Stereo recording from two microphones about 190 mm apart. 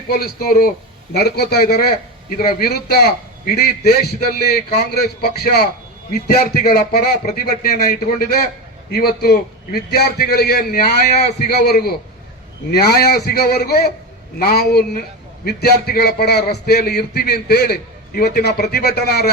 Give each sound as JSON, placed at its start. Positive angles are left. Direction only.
{"t": 0.1, "sound": "a man's voice", "side_deg": 50}